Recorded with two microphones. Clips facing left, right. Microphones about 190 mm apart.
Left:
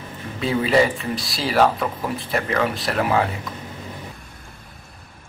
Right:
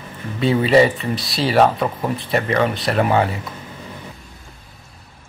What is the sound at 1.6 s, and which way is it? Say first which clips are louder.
Speech: right 2 dB; 30° right (ahead or behind).